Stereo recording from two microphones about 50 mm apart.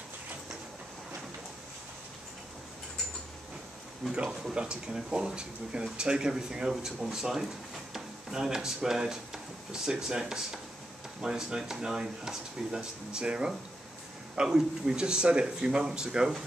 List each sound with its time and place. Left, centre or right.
4.1 s speech: centre